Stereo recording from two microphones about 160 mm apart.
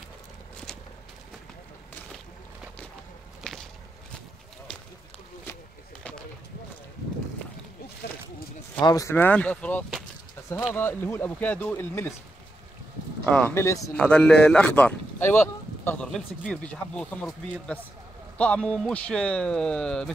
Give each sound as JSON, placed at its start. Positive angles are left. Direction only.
{"t": 3.4, "sound": "a sound", "side_deg": 5}
{"t": 8.8, "sound": "speech", "side_deg": 20}
{"t": 13.2, "sound": "speech", "side_deg": 5}
{"t": 13.6, "sound": "speech", "side_deg": 20}
{"t": 13.9, "sound": "speech", "side_deg": 5}